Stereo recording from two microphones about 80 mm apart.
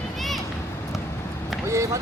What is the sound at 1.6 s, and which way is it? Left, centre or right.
Speech, right.